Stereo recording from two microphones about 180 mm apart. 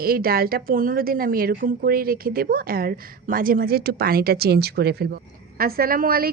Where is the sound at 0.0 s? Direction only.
55° right (ahead or behind).